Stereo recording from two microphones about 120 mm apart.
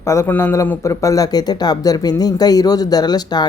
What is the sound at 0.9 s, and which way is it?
Speech, 30° left (ahead or behind).